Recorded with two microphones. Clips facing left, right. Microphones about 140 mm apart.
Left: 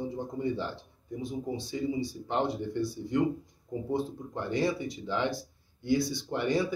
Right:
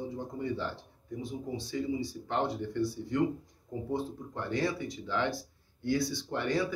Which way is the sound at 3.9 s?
20° left (ahead or behind).